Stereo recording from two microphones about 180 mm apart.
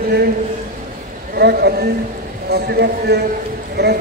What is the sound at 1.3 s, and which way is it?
A man's voice, 60° right (ahead or behind).